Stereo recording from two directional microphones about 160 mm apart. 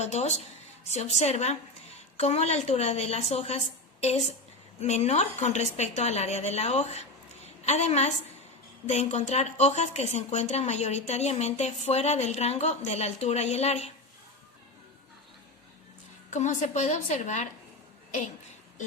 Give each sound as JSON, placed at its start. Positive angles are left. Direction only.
{"t": 0.0, "sound": "speech", "side_deg": 45}
{"t": 4.8, "sound": "a woman's voice", "side_deg": 45}
{"t": 16.3, "sound": "speech", "side_deg": 50}